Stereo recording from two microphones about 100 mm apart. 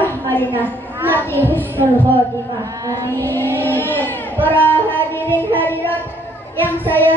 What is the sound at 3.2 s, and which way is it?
A woman's voice, 20° left (ahead or behind).